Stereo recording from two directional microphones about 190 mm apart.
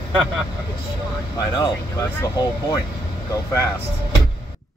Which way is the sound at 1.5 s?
20° left (ahead or behind).